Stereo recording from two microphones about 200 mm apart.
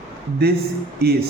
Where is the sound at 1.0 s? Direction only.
50° right (ahead or behind).